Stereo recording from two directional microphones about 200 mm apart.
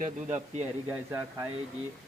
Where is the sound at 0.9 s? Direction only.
10° right (ahead or behind).